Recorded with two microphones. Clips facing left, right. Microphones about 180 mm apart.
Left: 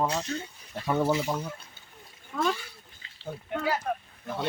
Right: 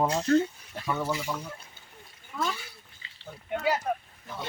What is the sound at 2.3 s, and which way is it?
Speech, 55° left (ahead or behind).